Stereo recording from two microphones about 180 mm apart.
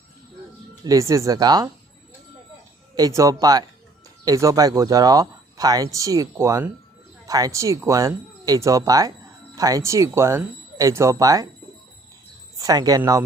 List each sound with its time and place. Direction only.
0.9 s speech: 20° right (ahead or behind)
2.9 s speech: 20° right (ahead or behind)
12.5 s speech: 20° right (ahead or behind)